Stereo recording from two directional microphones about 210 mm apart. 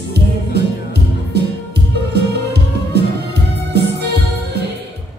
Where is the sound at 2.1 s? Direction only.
50° right (ahead or behind).